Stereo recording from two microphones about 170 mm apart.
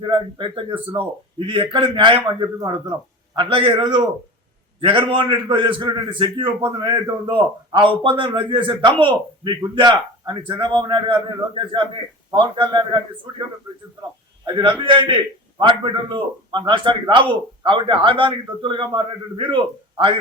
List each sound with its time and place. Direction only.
0.0 s a man's voice: 30° right (ahead or behind)
14.4 s a man's voice: 25° right (ahead or behind)